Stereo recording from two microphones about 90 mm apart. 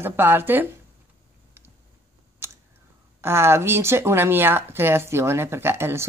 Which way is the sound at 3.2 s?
30° right (ahead or behind).